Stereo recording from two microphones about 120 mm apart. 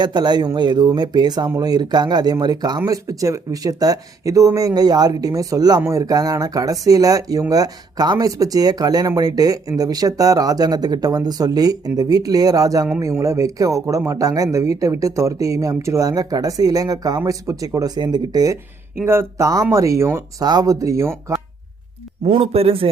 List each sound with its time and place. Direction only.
0.0 s speech: 35° right (ahead or behind)
18.9 s speech: 20° right (ahead or behind)
20.4 s speech: 35° right (ahead or behind)
22.3 s a man's voice: 50° right (ahead or behind)